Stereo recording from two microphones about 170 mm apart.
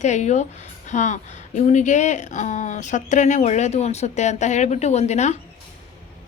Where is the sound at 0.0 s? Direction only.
45° left (ahead or behind).